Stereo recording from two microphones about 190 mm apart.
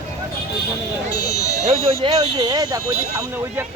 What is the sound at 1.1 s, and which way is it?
Speech, 55° left (ahead or behind).